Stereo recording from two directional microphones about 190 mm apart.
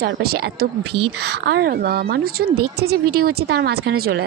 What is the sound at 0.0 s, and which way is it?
A woman's voice, 55° right (ahead or behind).